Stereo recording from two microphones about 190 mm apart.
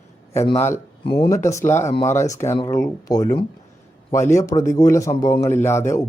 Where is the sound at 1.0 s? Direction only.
30° left (ahead or behind).